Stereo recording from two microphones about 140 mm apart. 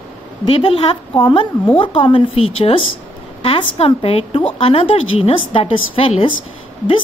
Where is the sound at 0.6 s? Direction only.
40° left (ahead or behind).